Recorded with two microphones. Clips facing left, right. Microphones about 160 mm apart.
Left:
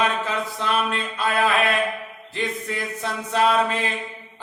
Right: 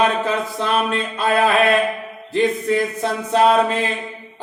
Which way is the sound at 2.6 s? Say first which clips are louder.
Right 9 dB; 30° right (ahead or behind).